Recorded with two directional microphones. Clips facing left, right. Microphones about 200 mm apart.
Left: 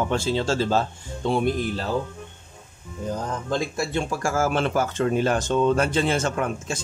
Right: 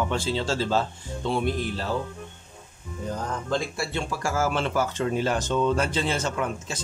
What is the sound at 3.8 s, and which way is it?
Speech, 45° left (ahead or behind).